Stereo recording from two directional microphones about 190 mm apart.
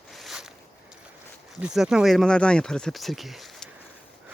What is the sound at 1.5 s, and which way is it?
Speech, 5° right (ahead or behind).